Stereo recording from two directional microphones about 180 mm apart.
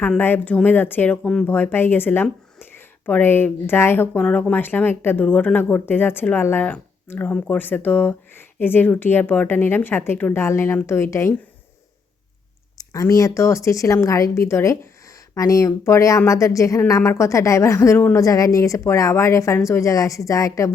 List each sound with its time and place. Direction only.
0.0 s speech: 10° left (ahead or behind)
12.7 s speech: 20° left (ahead or behind)